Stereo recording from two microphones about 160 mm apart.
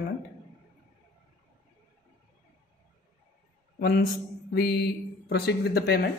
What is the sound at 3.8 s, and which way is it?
Speech, 75° left (ahead or behind).